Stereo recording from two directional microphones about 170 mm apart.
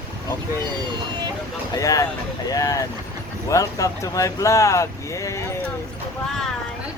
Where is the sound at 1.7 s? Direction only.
20° left (ahead or behind).